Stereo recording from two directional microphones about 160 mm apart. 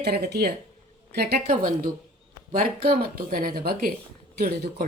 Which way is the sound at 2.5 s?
65° right (ahead or behind).